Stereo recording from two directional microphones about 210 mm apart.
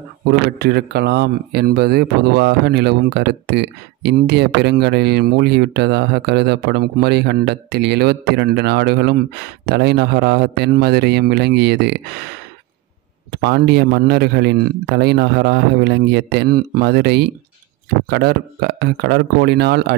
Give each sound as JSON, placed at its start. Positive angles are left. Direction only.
{"t": 0.3, "sound": "speech", "side_deg": -50}
{"t": 13.3, "sound": "speech", "side_deg": -50}